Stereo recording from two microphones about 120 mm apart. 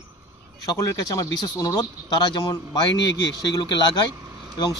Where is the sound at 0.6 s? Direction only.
30° left (ahead or behind).